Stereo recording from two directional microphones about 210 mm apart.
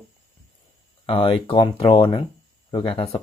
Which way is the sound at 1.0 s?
25° left (ahead or behind).